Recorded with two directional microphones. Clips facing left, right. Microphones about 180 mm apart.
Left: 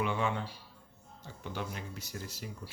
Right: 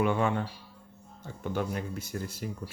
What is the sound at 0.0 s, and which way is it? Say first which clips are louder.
Speech: right 6 dB; 50° right (ahead or behind).